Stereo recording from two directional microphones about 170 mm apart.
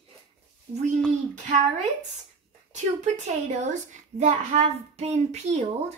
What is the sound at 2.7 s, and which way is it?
A woman's voice, 45° right (ahead or behind).